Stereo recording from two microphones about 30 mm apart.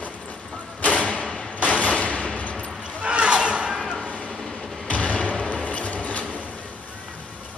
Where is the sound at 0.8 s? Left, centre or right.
Left.